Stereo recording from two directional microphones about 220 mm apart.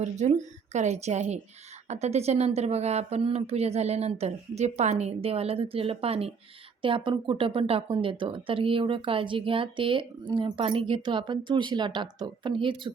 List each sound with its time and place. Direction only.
0.0 s a woman's voice: 30° right (ahead or behind)